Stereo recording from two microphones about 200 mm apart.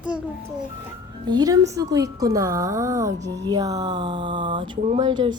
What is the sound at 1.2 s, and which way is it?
A woman's voice, 20° right (ahead or behind).